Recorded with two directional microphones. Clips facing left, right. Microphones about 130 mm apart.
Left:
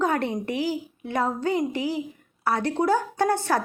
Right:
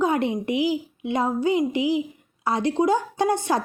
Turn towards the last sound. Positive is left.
turn(degrees=-15)  # may be behind; listen again after turning